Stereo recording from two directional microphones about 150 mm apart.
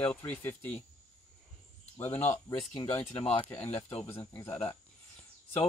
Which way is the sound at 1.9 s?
15° left (ahead or behind).